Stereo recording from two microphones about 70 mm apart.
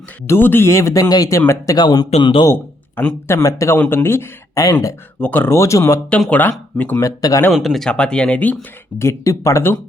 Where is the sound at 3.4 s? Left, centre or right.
Left.